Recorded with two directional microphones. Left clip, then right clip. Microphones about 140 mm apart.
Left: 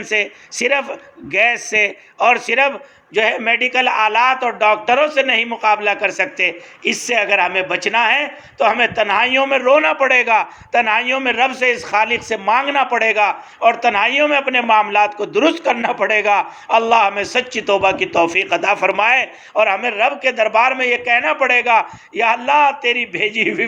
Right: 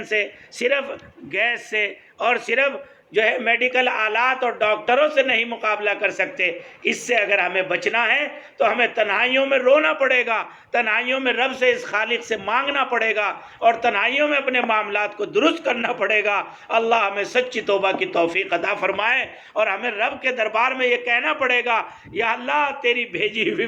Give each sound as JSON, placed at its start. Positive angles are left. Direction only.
{"t": 0.1, "sound": "speech", "side_deg": 45}